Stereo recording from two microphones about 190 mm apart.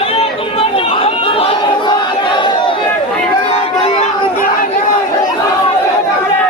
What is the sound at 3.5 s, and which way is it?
Chatter, 35° left (ahead or behind).